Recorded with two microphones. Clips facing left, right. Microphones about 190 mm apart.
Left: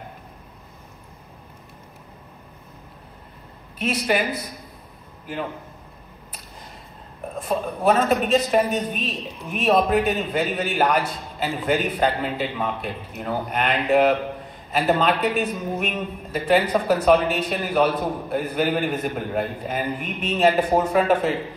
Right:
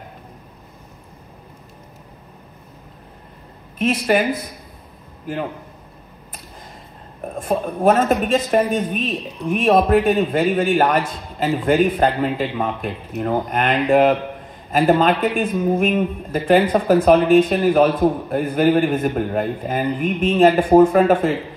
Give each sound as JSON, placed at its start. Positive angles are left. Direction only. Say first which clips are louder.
{"t": 3.8, "sound": "a man's voice", "louder": "right 5 dB", "side_deg": -50}
{"t": 7.3, "sound": "a man's voice", "louder": "right 4 dB", "side_deg": -50}